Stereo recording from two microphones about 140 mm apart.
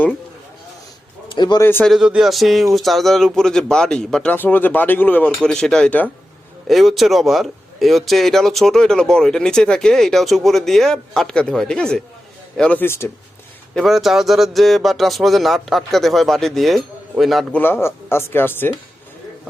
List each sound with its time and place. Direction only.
1.4 s speech: 30° left (ahead or behind)
1.8 s a man's voice: 5° right (ahead or behind); by 13.1 s 15° left (ahead or behind)
13.7 s a man's voice: centre (ahead or behind)
17.6 s speech: 15° left (ahead or behind)